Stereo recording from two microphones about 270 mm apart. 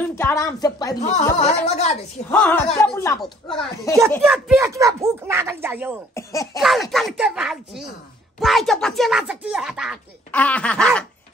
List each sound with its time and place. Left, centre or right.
0.1 s speech: centre
1.1 s speech: left
2.3 s speech: centre
4.1 s a child's voice: centre
6.1 s speech: centre
6.6 s speech: centre